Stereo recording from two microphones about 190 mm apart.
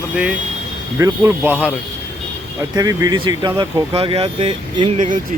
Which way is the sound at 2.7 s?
20° right (ahead or behind).